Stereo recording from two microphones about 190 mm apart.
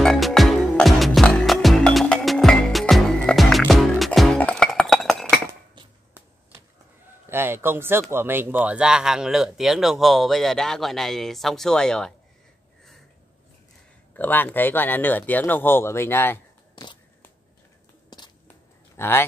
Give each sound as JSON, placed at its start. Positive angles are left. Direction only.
{"t": 0.0, "sound": "music", "side_deg": 0}
{"t": 7.2, "sound": "speech", "side_deg": -10}
{"t": 14.1, "sound": "speech", "side_deg": 10}
{"t": 18.1, "sound": "a sound", "side_deg": 20}
{"t": 18.9, "sound": "speech", "side_deg": 10}